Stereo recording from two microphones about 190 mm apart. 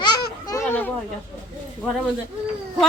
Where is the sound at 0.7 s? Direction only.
10° left (ahead or behind).